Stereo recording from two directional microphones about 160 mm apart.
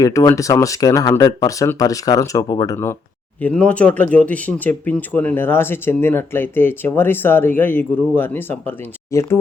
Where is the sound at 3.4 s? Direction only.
10° left (ahead or behind).